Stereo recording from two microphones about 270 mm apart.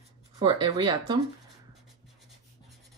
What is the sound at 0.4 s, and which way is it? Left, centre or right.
Speech, centre.